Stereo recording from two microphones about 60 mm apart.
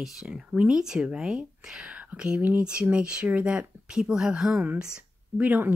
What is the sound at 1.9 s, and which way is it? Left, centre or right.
Speech, right.